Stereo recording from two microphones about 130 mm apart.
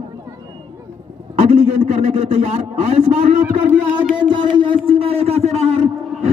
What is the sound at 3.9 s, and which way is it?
Speech, 35° right (ahead or behind).